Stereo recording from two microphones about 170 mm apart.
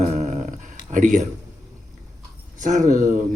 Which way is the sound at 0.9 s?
45° right (ahead or behind).